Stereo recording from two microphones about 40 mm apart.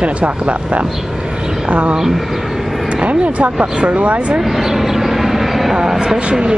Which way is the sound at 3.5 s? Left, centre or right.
Centre.